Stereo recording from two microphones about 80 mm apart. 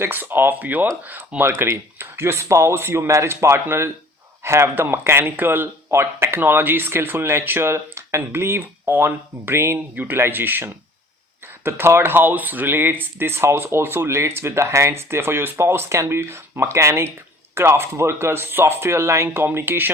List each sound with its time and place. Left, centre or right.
0.0 s speech: right
9.7 s speech: centre